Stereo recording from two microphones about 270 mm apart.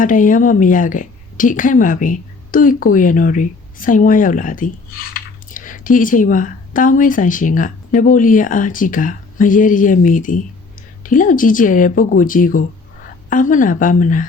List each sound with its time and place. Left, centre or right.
0.0 s a woman's voice: left